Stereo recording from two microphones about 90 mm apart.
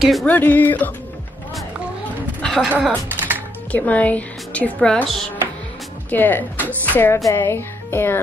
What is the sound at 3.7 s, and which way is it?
A woman's voice, 15° left (ahead or behind).